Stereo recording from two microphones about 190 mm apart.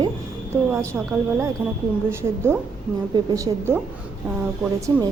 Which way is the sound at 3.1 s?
20° right (ahead or behind).